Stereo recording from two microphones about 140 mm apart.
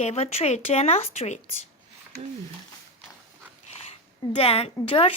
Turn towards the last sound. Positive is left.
turn(degrees=40)  # may be behind; listen again after turning